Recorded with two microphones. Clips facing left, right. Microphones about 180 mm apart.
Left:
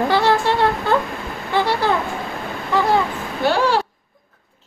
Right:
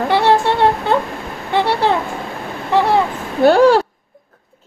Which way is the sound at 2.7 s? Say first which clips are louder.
Right 3 dB; 30° right (ahead or behind).